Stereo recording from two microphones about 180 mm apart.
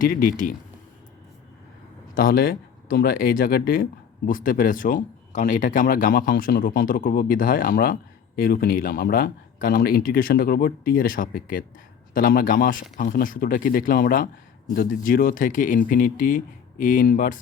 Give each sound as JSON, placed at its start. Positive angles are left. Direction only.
{"t": 0.0, "sound": "speech", "side_deg": 50}
{"t": 2.1, "sound": "speech", "side_deg": 55}